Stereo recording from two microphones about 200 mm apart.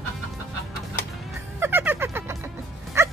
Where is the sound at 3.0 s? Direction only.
15° right (ahead or behind).